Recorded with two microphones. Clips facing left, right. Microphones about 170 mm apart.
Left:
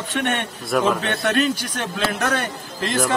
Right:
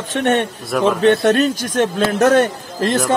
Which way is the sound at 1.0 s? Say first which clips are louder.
Right 8 dB; 40° right (ahead or behind).